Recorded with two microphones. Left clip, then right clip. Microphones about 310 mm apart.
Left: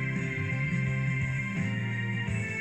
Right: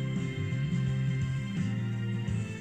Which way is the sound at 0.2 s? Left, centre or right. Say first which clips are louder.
Left 6 dB; centre.